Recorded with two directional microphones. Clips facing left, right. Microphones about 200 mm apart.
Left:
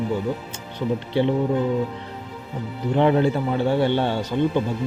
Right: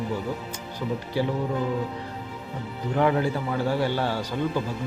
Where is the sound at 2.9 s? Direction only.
25° left (ahead or behind).